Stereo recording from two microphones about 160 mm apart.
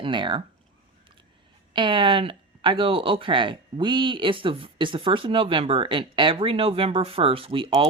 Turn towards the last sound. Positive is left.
turn(degrees=-35)  # may be behind; listen again after turning